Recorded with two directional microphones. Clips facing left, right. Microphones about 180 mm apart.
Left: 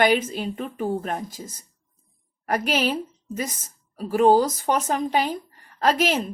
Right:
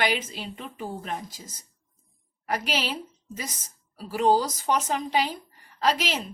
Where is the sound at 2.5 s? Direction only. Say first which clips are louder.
Left 6 dB; 50° left (ahead or behind).